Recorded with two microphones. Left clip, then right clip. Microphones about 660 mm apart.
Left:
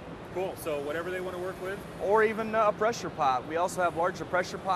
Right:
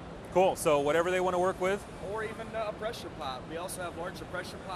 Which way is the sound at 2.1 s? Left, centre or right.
Left.